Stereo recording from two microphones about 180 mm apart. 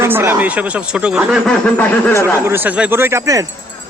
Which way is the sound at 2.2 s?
15° right (ahead or behind).